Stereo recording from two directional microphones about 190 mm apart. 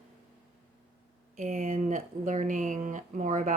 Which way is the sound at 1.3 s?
35° right (ahead or behind).